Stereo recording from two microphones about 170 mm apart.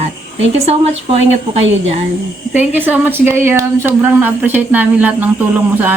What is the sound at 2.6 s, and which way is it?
Speech, 10° right (ahead or behind).